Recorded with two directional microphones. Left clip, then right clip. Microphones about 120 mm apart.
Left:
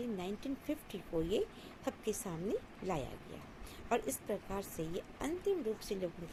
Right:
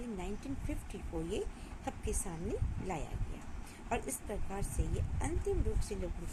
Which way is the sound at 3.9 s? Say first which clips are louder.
Left 3 dB; 25° left (ahead or behind).